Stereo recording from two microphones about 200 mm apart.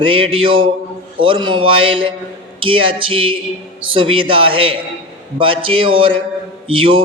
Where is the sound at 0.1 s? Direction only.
25° right (ahead or behind).